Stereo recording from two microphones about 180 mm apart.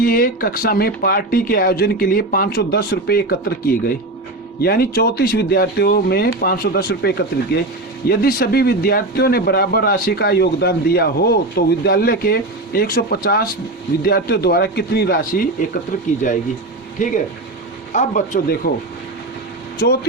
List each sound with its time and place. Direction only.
0.0 s speech: 55° left (ahead or behind)
17.9 s a man's voice: 45° left (ahead or behind)